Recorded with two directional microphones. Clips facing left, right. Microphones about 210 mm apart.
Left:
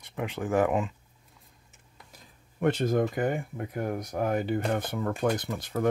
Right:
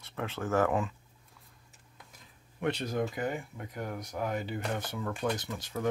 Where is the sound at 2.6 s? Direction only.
45° left (ahead or behind).